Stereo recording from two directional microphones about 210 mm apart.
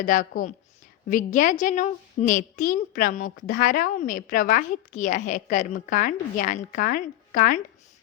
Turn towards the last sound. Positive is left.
turn(degrees=40)  # may be behind; listen again after turning